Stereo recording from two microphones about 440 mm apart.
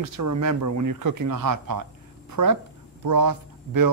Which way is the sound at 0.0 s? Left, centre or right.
Right.